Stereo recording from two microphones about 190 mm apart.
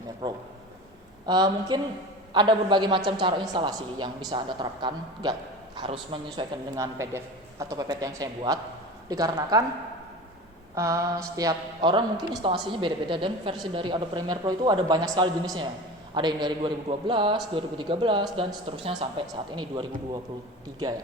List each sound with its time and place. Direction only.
0.2 s a man's voice: 25° right (ahead or behind)
10.8 s a sound: 15° right (ahead or behind)
11.3 s a man's voice: 20° right (ahead or behind)